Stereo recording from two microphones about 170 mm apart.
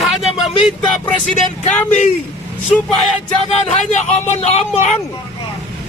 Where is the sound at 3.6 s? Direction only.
40° left (ahead or behind).